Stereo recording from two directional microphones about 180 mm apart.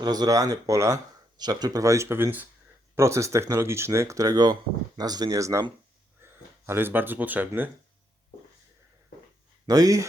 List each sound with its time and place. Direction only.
0.0 s speech: 20° right (ahead or behind)
9.6 s speech: 20° right (ahead or behind)